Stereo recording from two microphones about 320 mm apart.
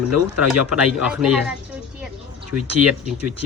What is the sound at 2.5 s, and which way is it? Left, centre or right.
Speech, right.